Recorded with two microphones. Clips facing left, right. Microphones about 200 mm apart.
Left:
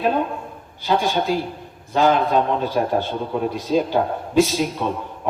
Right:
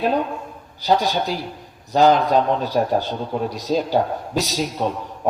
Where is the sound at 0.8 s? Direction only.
40° right (ahead or behind).